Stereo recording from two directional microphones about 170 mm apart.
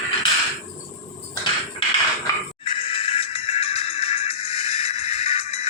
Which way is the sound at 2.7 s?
35° left (ahead or behind).